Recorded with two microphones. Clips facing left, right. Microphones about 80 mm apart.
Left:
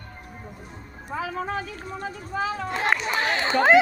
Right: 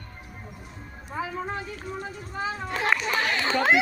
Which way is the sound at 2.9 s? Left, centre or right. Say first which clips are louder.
Left 1 dB; left.